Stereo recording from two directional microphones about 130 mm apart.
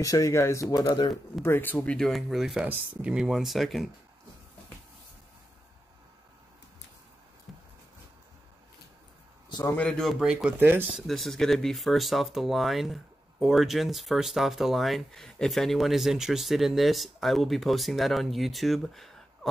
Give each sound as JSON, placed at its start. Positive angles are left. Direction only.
{"t": 0.0, "sound": "speech", "side_deg": 25}
{"t": 1.4, "sound": "speech", "side_deg": 15}
{"t": 7.5, "sound": "a sound", "side_deg": 0}
{"t": 9.7, "sound": "speech", "side_deg": 10}
{"t": 11.0, "sound": "speech", "side_deg": 0}